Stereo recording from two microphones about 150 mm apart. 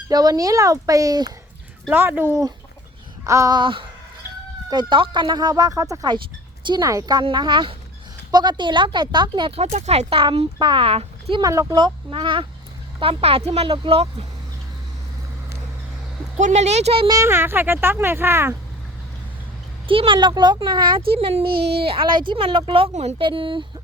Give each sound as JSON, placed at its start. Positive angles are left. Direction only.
{"t": 0.1, "sound": "speech", "side_deg": -25}
{"t": 1.9, "sound": "speech", "side_deg": -15}
{"t": 9.6, "sound": "speech", "side_deg": -45}
{"t": 11.4, "sound": "speech", "side_deg": -25}
{"t": 16.4, "sound": "speech", "side_deg": -50}
{"t": 17.1, "sound": "speech", "side_deg": -20}
{"t": 19.9, "sound": "speech", "side_deg": -35}
{"t": 21.5, "sound": "speech", "side_deg": -90}
{"t": 21.8, "sound": "speech", "side_deg": -35}